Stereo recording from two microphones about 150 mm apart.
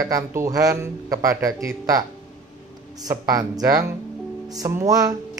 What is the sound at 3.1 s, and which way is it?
Speech, 25° right (ahead or behind).